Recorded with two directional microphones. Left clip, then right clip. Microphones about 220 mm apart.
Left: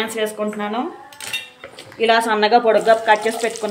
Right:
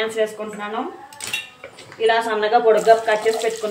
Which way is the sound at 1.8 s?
50° left (ahead or behind).